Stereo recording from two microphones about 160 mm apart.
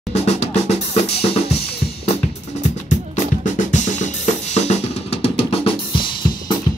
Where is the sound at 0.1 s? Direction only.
45° left (ahead or behind).